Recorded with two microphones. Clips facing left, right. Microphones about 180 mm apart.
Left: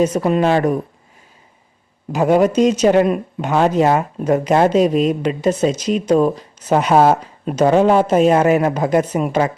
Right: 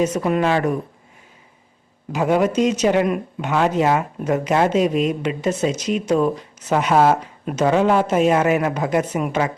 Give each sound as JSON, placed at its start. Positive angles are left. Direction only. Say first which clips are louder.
{"t": 0.0, "sound": "speech", "louder": "left 3 dB", "side_deg": 30}
{"t": 2.1, "sound": "speech", "louder": "left 4 dB", "side_deg": 40}